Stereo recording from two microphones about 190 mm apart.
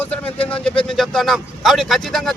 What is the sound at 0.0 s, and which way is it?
A man's voice, 10° left (ahead or behind).